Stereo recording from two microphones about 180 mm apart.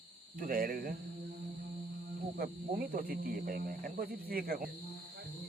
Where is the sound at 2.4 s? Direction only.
55° right (ahead or behind).